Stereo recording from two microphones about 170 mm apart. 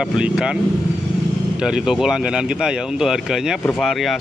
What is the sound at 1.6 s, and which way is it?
Speech, 5° right (ahead or behind).